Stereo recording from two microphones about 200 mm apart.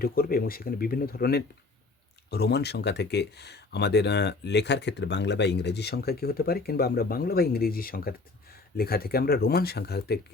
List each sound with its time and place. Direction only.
0.0 s speech: 50° left (ahead or behind)